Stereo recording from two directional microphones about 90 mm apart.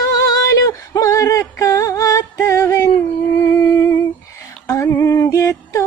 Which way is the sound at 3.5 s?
35° left (ahead or behind).